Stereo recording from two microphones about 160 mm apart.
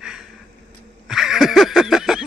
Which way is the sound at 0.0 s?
5° right (ahead or behind).